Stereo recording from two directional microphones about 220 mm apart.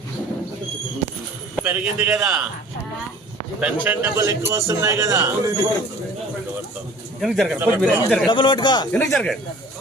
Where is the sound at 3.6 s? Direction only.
5° right (ahead or behind).